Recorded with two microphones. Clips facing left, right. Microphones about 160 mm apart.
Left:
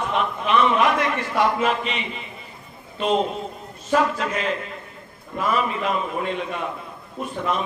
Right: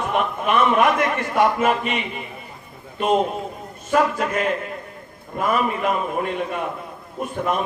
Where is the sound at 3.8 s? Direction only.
50° right (ahead or behind).